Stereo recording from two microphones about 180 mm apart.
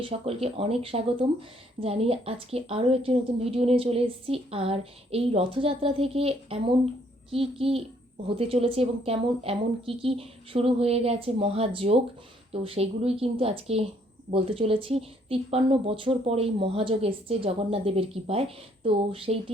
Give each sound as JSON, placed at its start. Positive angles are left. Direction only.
{"t": 0.0, "sound": "speech", "side_deg": -30}